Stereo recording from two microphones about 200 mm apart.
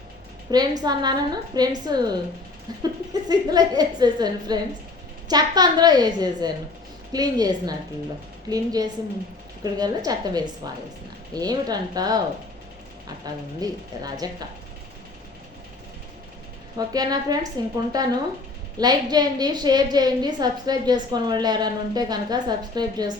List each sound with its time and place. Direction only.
0.5 s a woman's voice: 20° right (ahead or behind)
3.1 s a woman's voice: 20° right (ahead or behind)
13.2 s a woman's voice: 20° right (ahead or behind)
16.7 s a woman's voice: 20° right (ahead or behind)